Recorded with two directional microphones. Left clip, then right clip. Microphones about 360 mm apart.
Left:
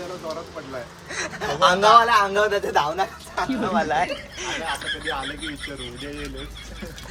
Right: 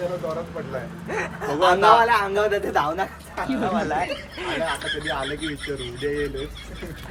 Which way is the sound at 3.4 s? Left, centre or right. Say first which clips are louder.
Even; centre.